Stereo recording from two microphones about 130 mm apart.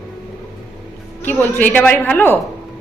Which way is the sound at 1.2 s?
15° left (ahead or behind).